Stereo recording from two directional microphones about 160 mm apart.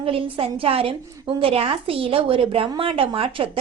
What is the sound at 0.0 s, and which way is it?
A woman's voice, 35° right (ahead or behind).